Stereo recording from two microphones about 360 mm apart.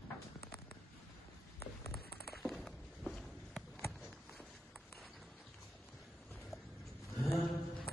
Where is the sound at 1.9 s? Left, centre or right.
Left.